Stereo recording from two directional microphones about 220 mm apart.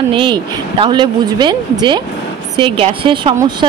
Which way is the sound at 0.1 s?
20° right (ahead or behind).